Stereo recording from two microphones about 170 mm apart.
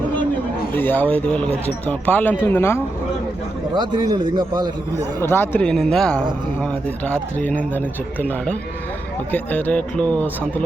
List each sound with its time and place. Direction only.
0.7 s speech: 10° left (ahead or behind)
3.8 s a man's voice: 25° right (ahead or behind)
5.2 s speech: 15° left (ahead or behind)